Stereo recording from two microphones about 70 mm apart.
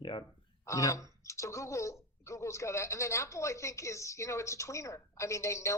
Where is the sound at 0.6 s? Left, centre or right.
Left.